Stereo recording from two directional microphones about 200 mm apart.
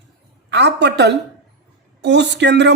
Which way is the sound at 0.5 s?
60° right (ahead or behind).